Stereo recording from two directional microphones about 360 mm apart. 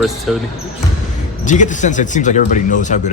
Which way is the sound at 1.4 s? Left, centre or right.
Centre.